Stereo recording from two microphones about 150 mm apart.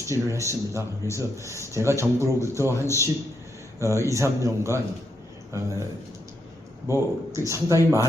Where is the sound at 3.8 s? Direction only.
20° right (ahead or behind).